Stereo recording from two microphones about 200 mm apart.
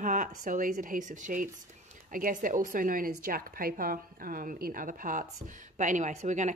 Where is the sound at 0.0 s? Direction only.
40° right (ahead or behind).